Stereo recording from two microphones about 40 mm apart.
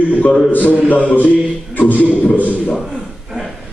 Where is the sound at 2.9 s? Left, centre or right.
Right.